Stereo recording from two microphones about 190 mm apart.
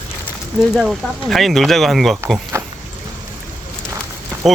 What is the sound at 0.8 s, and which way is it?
Speech, centre (ahead or behind).